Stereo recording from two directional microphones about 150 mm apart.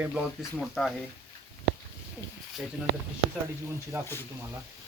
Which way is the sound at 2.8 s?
10° right (ahead or behind).